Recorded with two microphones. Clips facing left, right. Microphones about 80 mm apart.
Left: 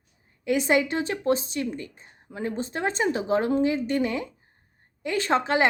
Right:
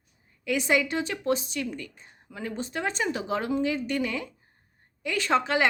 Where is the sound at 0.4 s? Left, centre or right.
Left.